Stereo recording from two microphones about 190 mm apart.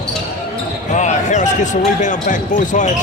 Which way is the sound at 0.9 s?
40° left (ahead or behind).